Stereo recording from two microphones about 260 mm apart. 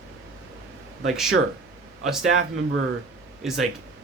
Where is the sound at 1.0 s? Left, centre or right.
Centre.